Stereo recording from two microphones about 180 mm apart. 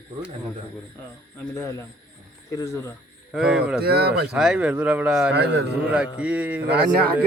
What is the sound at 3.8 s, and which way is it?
Speech, 65° right (ahead or behind).